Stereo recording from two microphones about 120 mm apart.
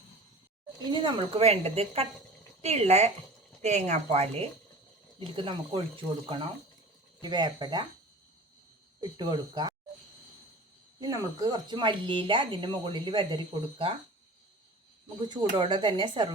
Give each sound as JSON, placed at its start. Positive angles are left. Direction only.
{"t": 0.8, "sound": "speech", "side_deg": -40}
{"t": 1.4, "sound": "a woman's voice", "side_deg": -60}
{"t": 5.2, "sound": "speech", "side_deg": -45}
{"t": 9.0, "sound": "speech", "side_deg": -35}
{"t": 11.0, "sound": "speech", "side_deg": -30}
{"t": 15.3, "sound": "speech", "side_deg": -45}